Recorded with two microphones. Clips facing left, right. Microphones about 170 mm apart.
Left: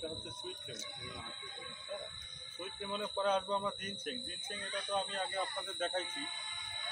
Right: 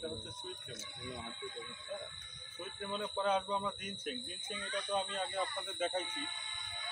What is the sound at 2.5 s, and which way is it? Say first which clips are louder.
Speech: even; centre (ahead or behind).